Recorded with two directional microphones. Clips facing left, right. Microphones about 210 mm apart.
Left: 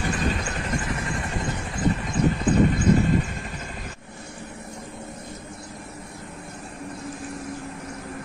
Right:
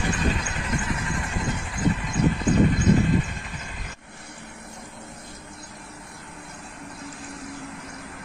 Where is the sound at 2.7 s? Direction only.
45° left (ahead or behind).